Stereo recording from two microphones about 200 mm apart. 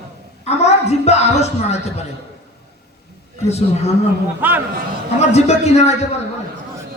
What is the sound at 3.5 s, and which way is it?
Speech, 30° left (ahead or behind).